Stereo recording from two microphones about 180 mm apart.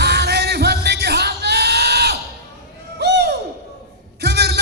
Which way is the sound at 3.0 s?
65° right (ahead or behind).